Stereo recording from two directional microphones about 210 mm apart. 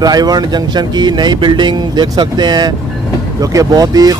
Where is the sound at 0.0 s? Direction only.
20° right (ahead or behind).